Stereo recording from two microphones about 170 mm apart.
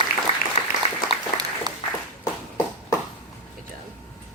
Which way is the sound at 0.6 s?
40° left (ahead or behind).